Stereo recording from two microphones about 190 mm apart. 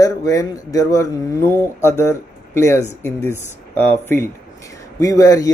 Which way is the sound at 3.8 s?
10° left (ahead or behind).